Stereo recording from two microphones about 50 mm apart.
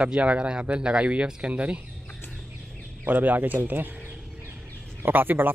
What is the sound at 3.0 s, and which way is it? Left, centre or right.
A man's voice, right.